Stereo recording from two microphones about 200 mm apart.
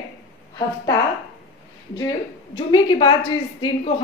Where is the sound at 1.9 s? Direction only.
20° left (ahead or behind).